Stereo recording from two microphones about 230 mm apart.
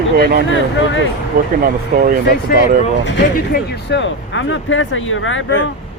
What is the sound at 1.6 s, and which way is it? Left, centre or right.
Speech, right.